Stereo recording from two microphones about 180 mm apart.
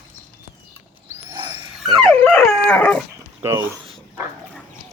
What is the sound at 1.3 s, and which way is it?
Wild animals, 25° right (ahead or behind).